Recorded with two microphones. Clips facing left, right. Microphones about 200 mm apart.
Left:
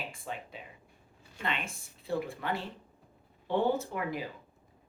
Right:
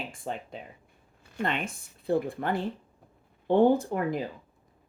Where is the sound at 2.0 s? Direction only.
55° right (ahead or behind).